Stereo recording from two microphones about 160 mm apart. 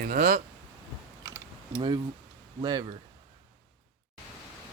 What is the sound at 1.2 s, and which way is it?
Typing, 20° right (ahead or behind).